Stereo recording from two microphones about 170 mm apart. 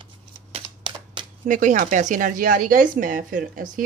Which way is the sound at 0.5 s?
25° right (ahead or behind).